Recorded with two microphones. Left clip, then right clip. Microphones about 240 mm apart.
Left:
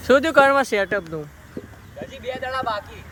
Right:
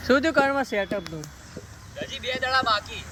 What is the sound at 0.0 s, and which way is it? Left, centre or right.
Speech, left.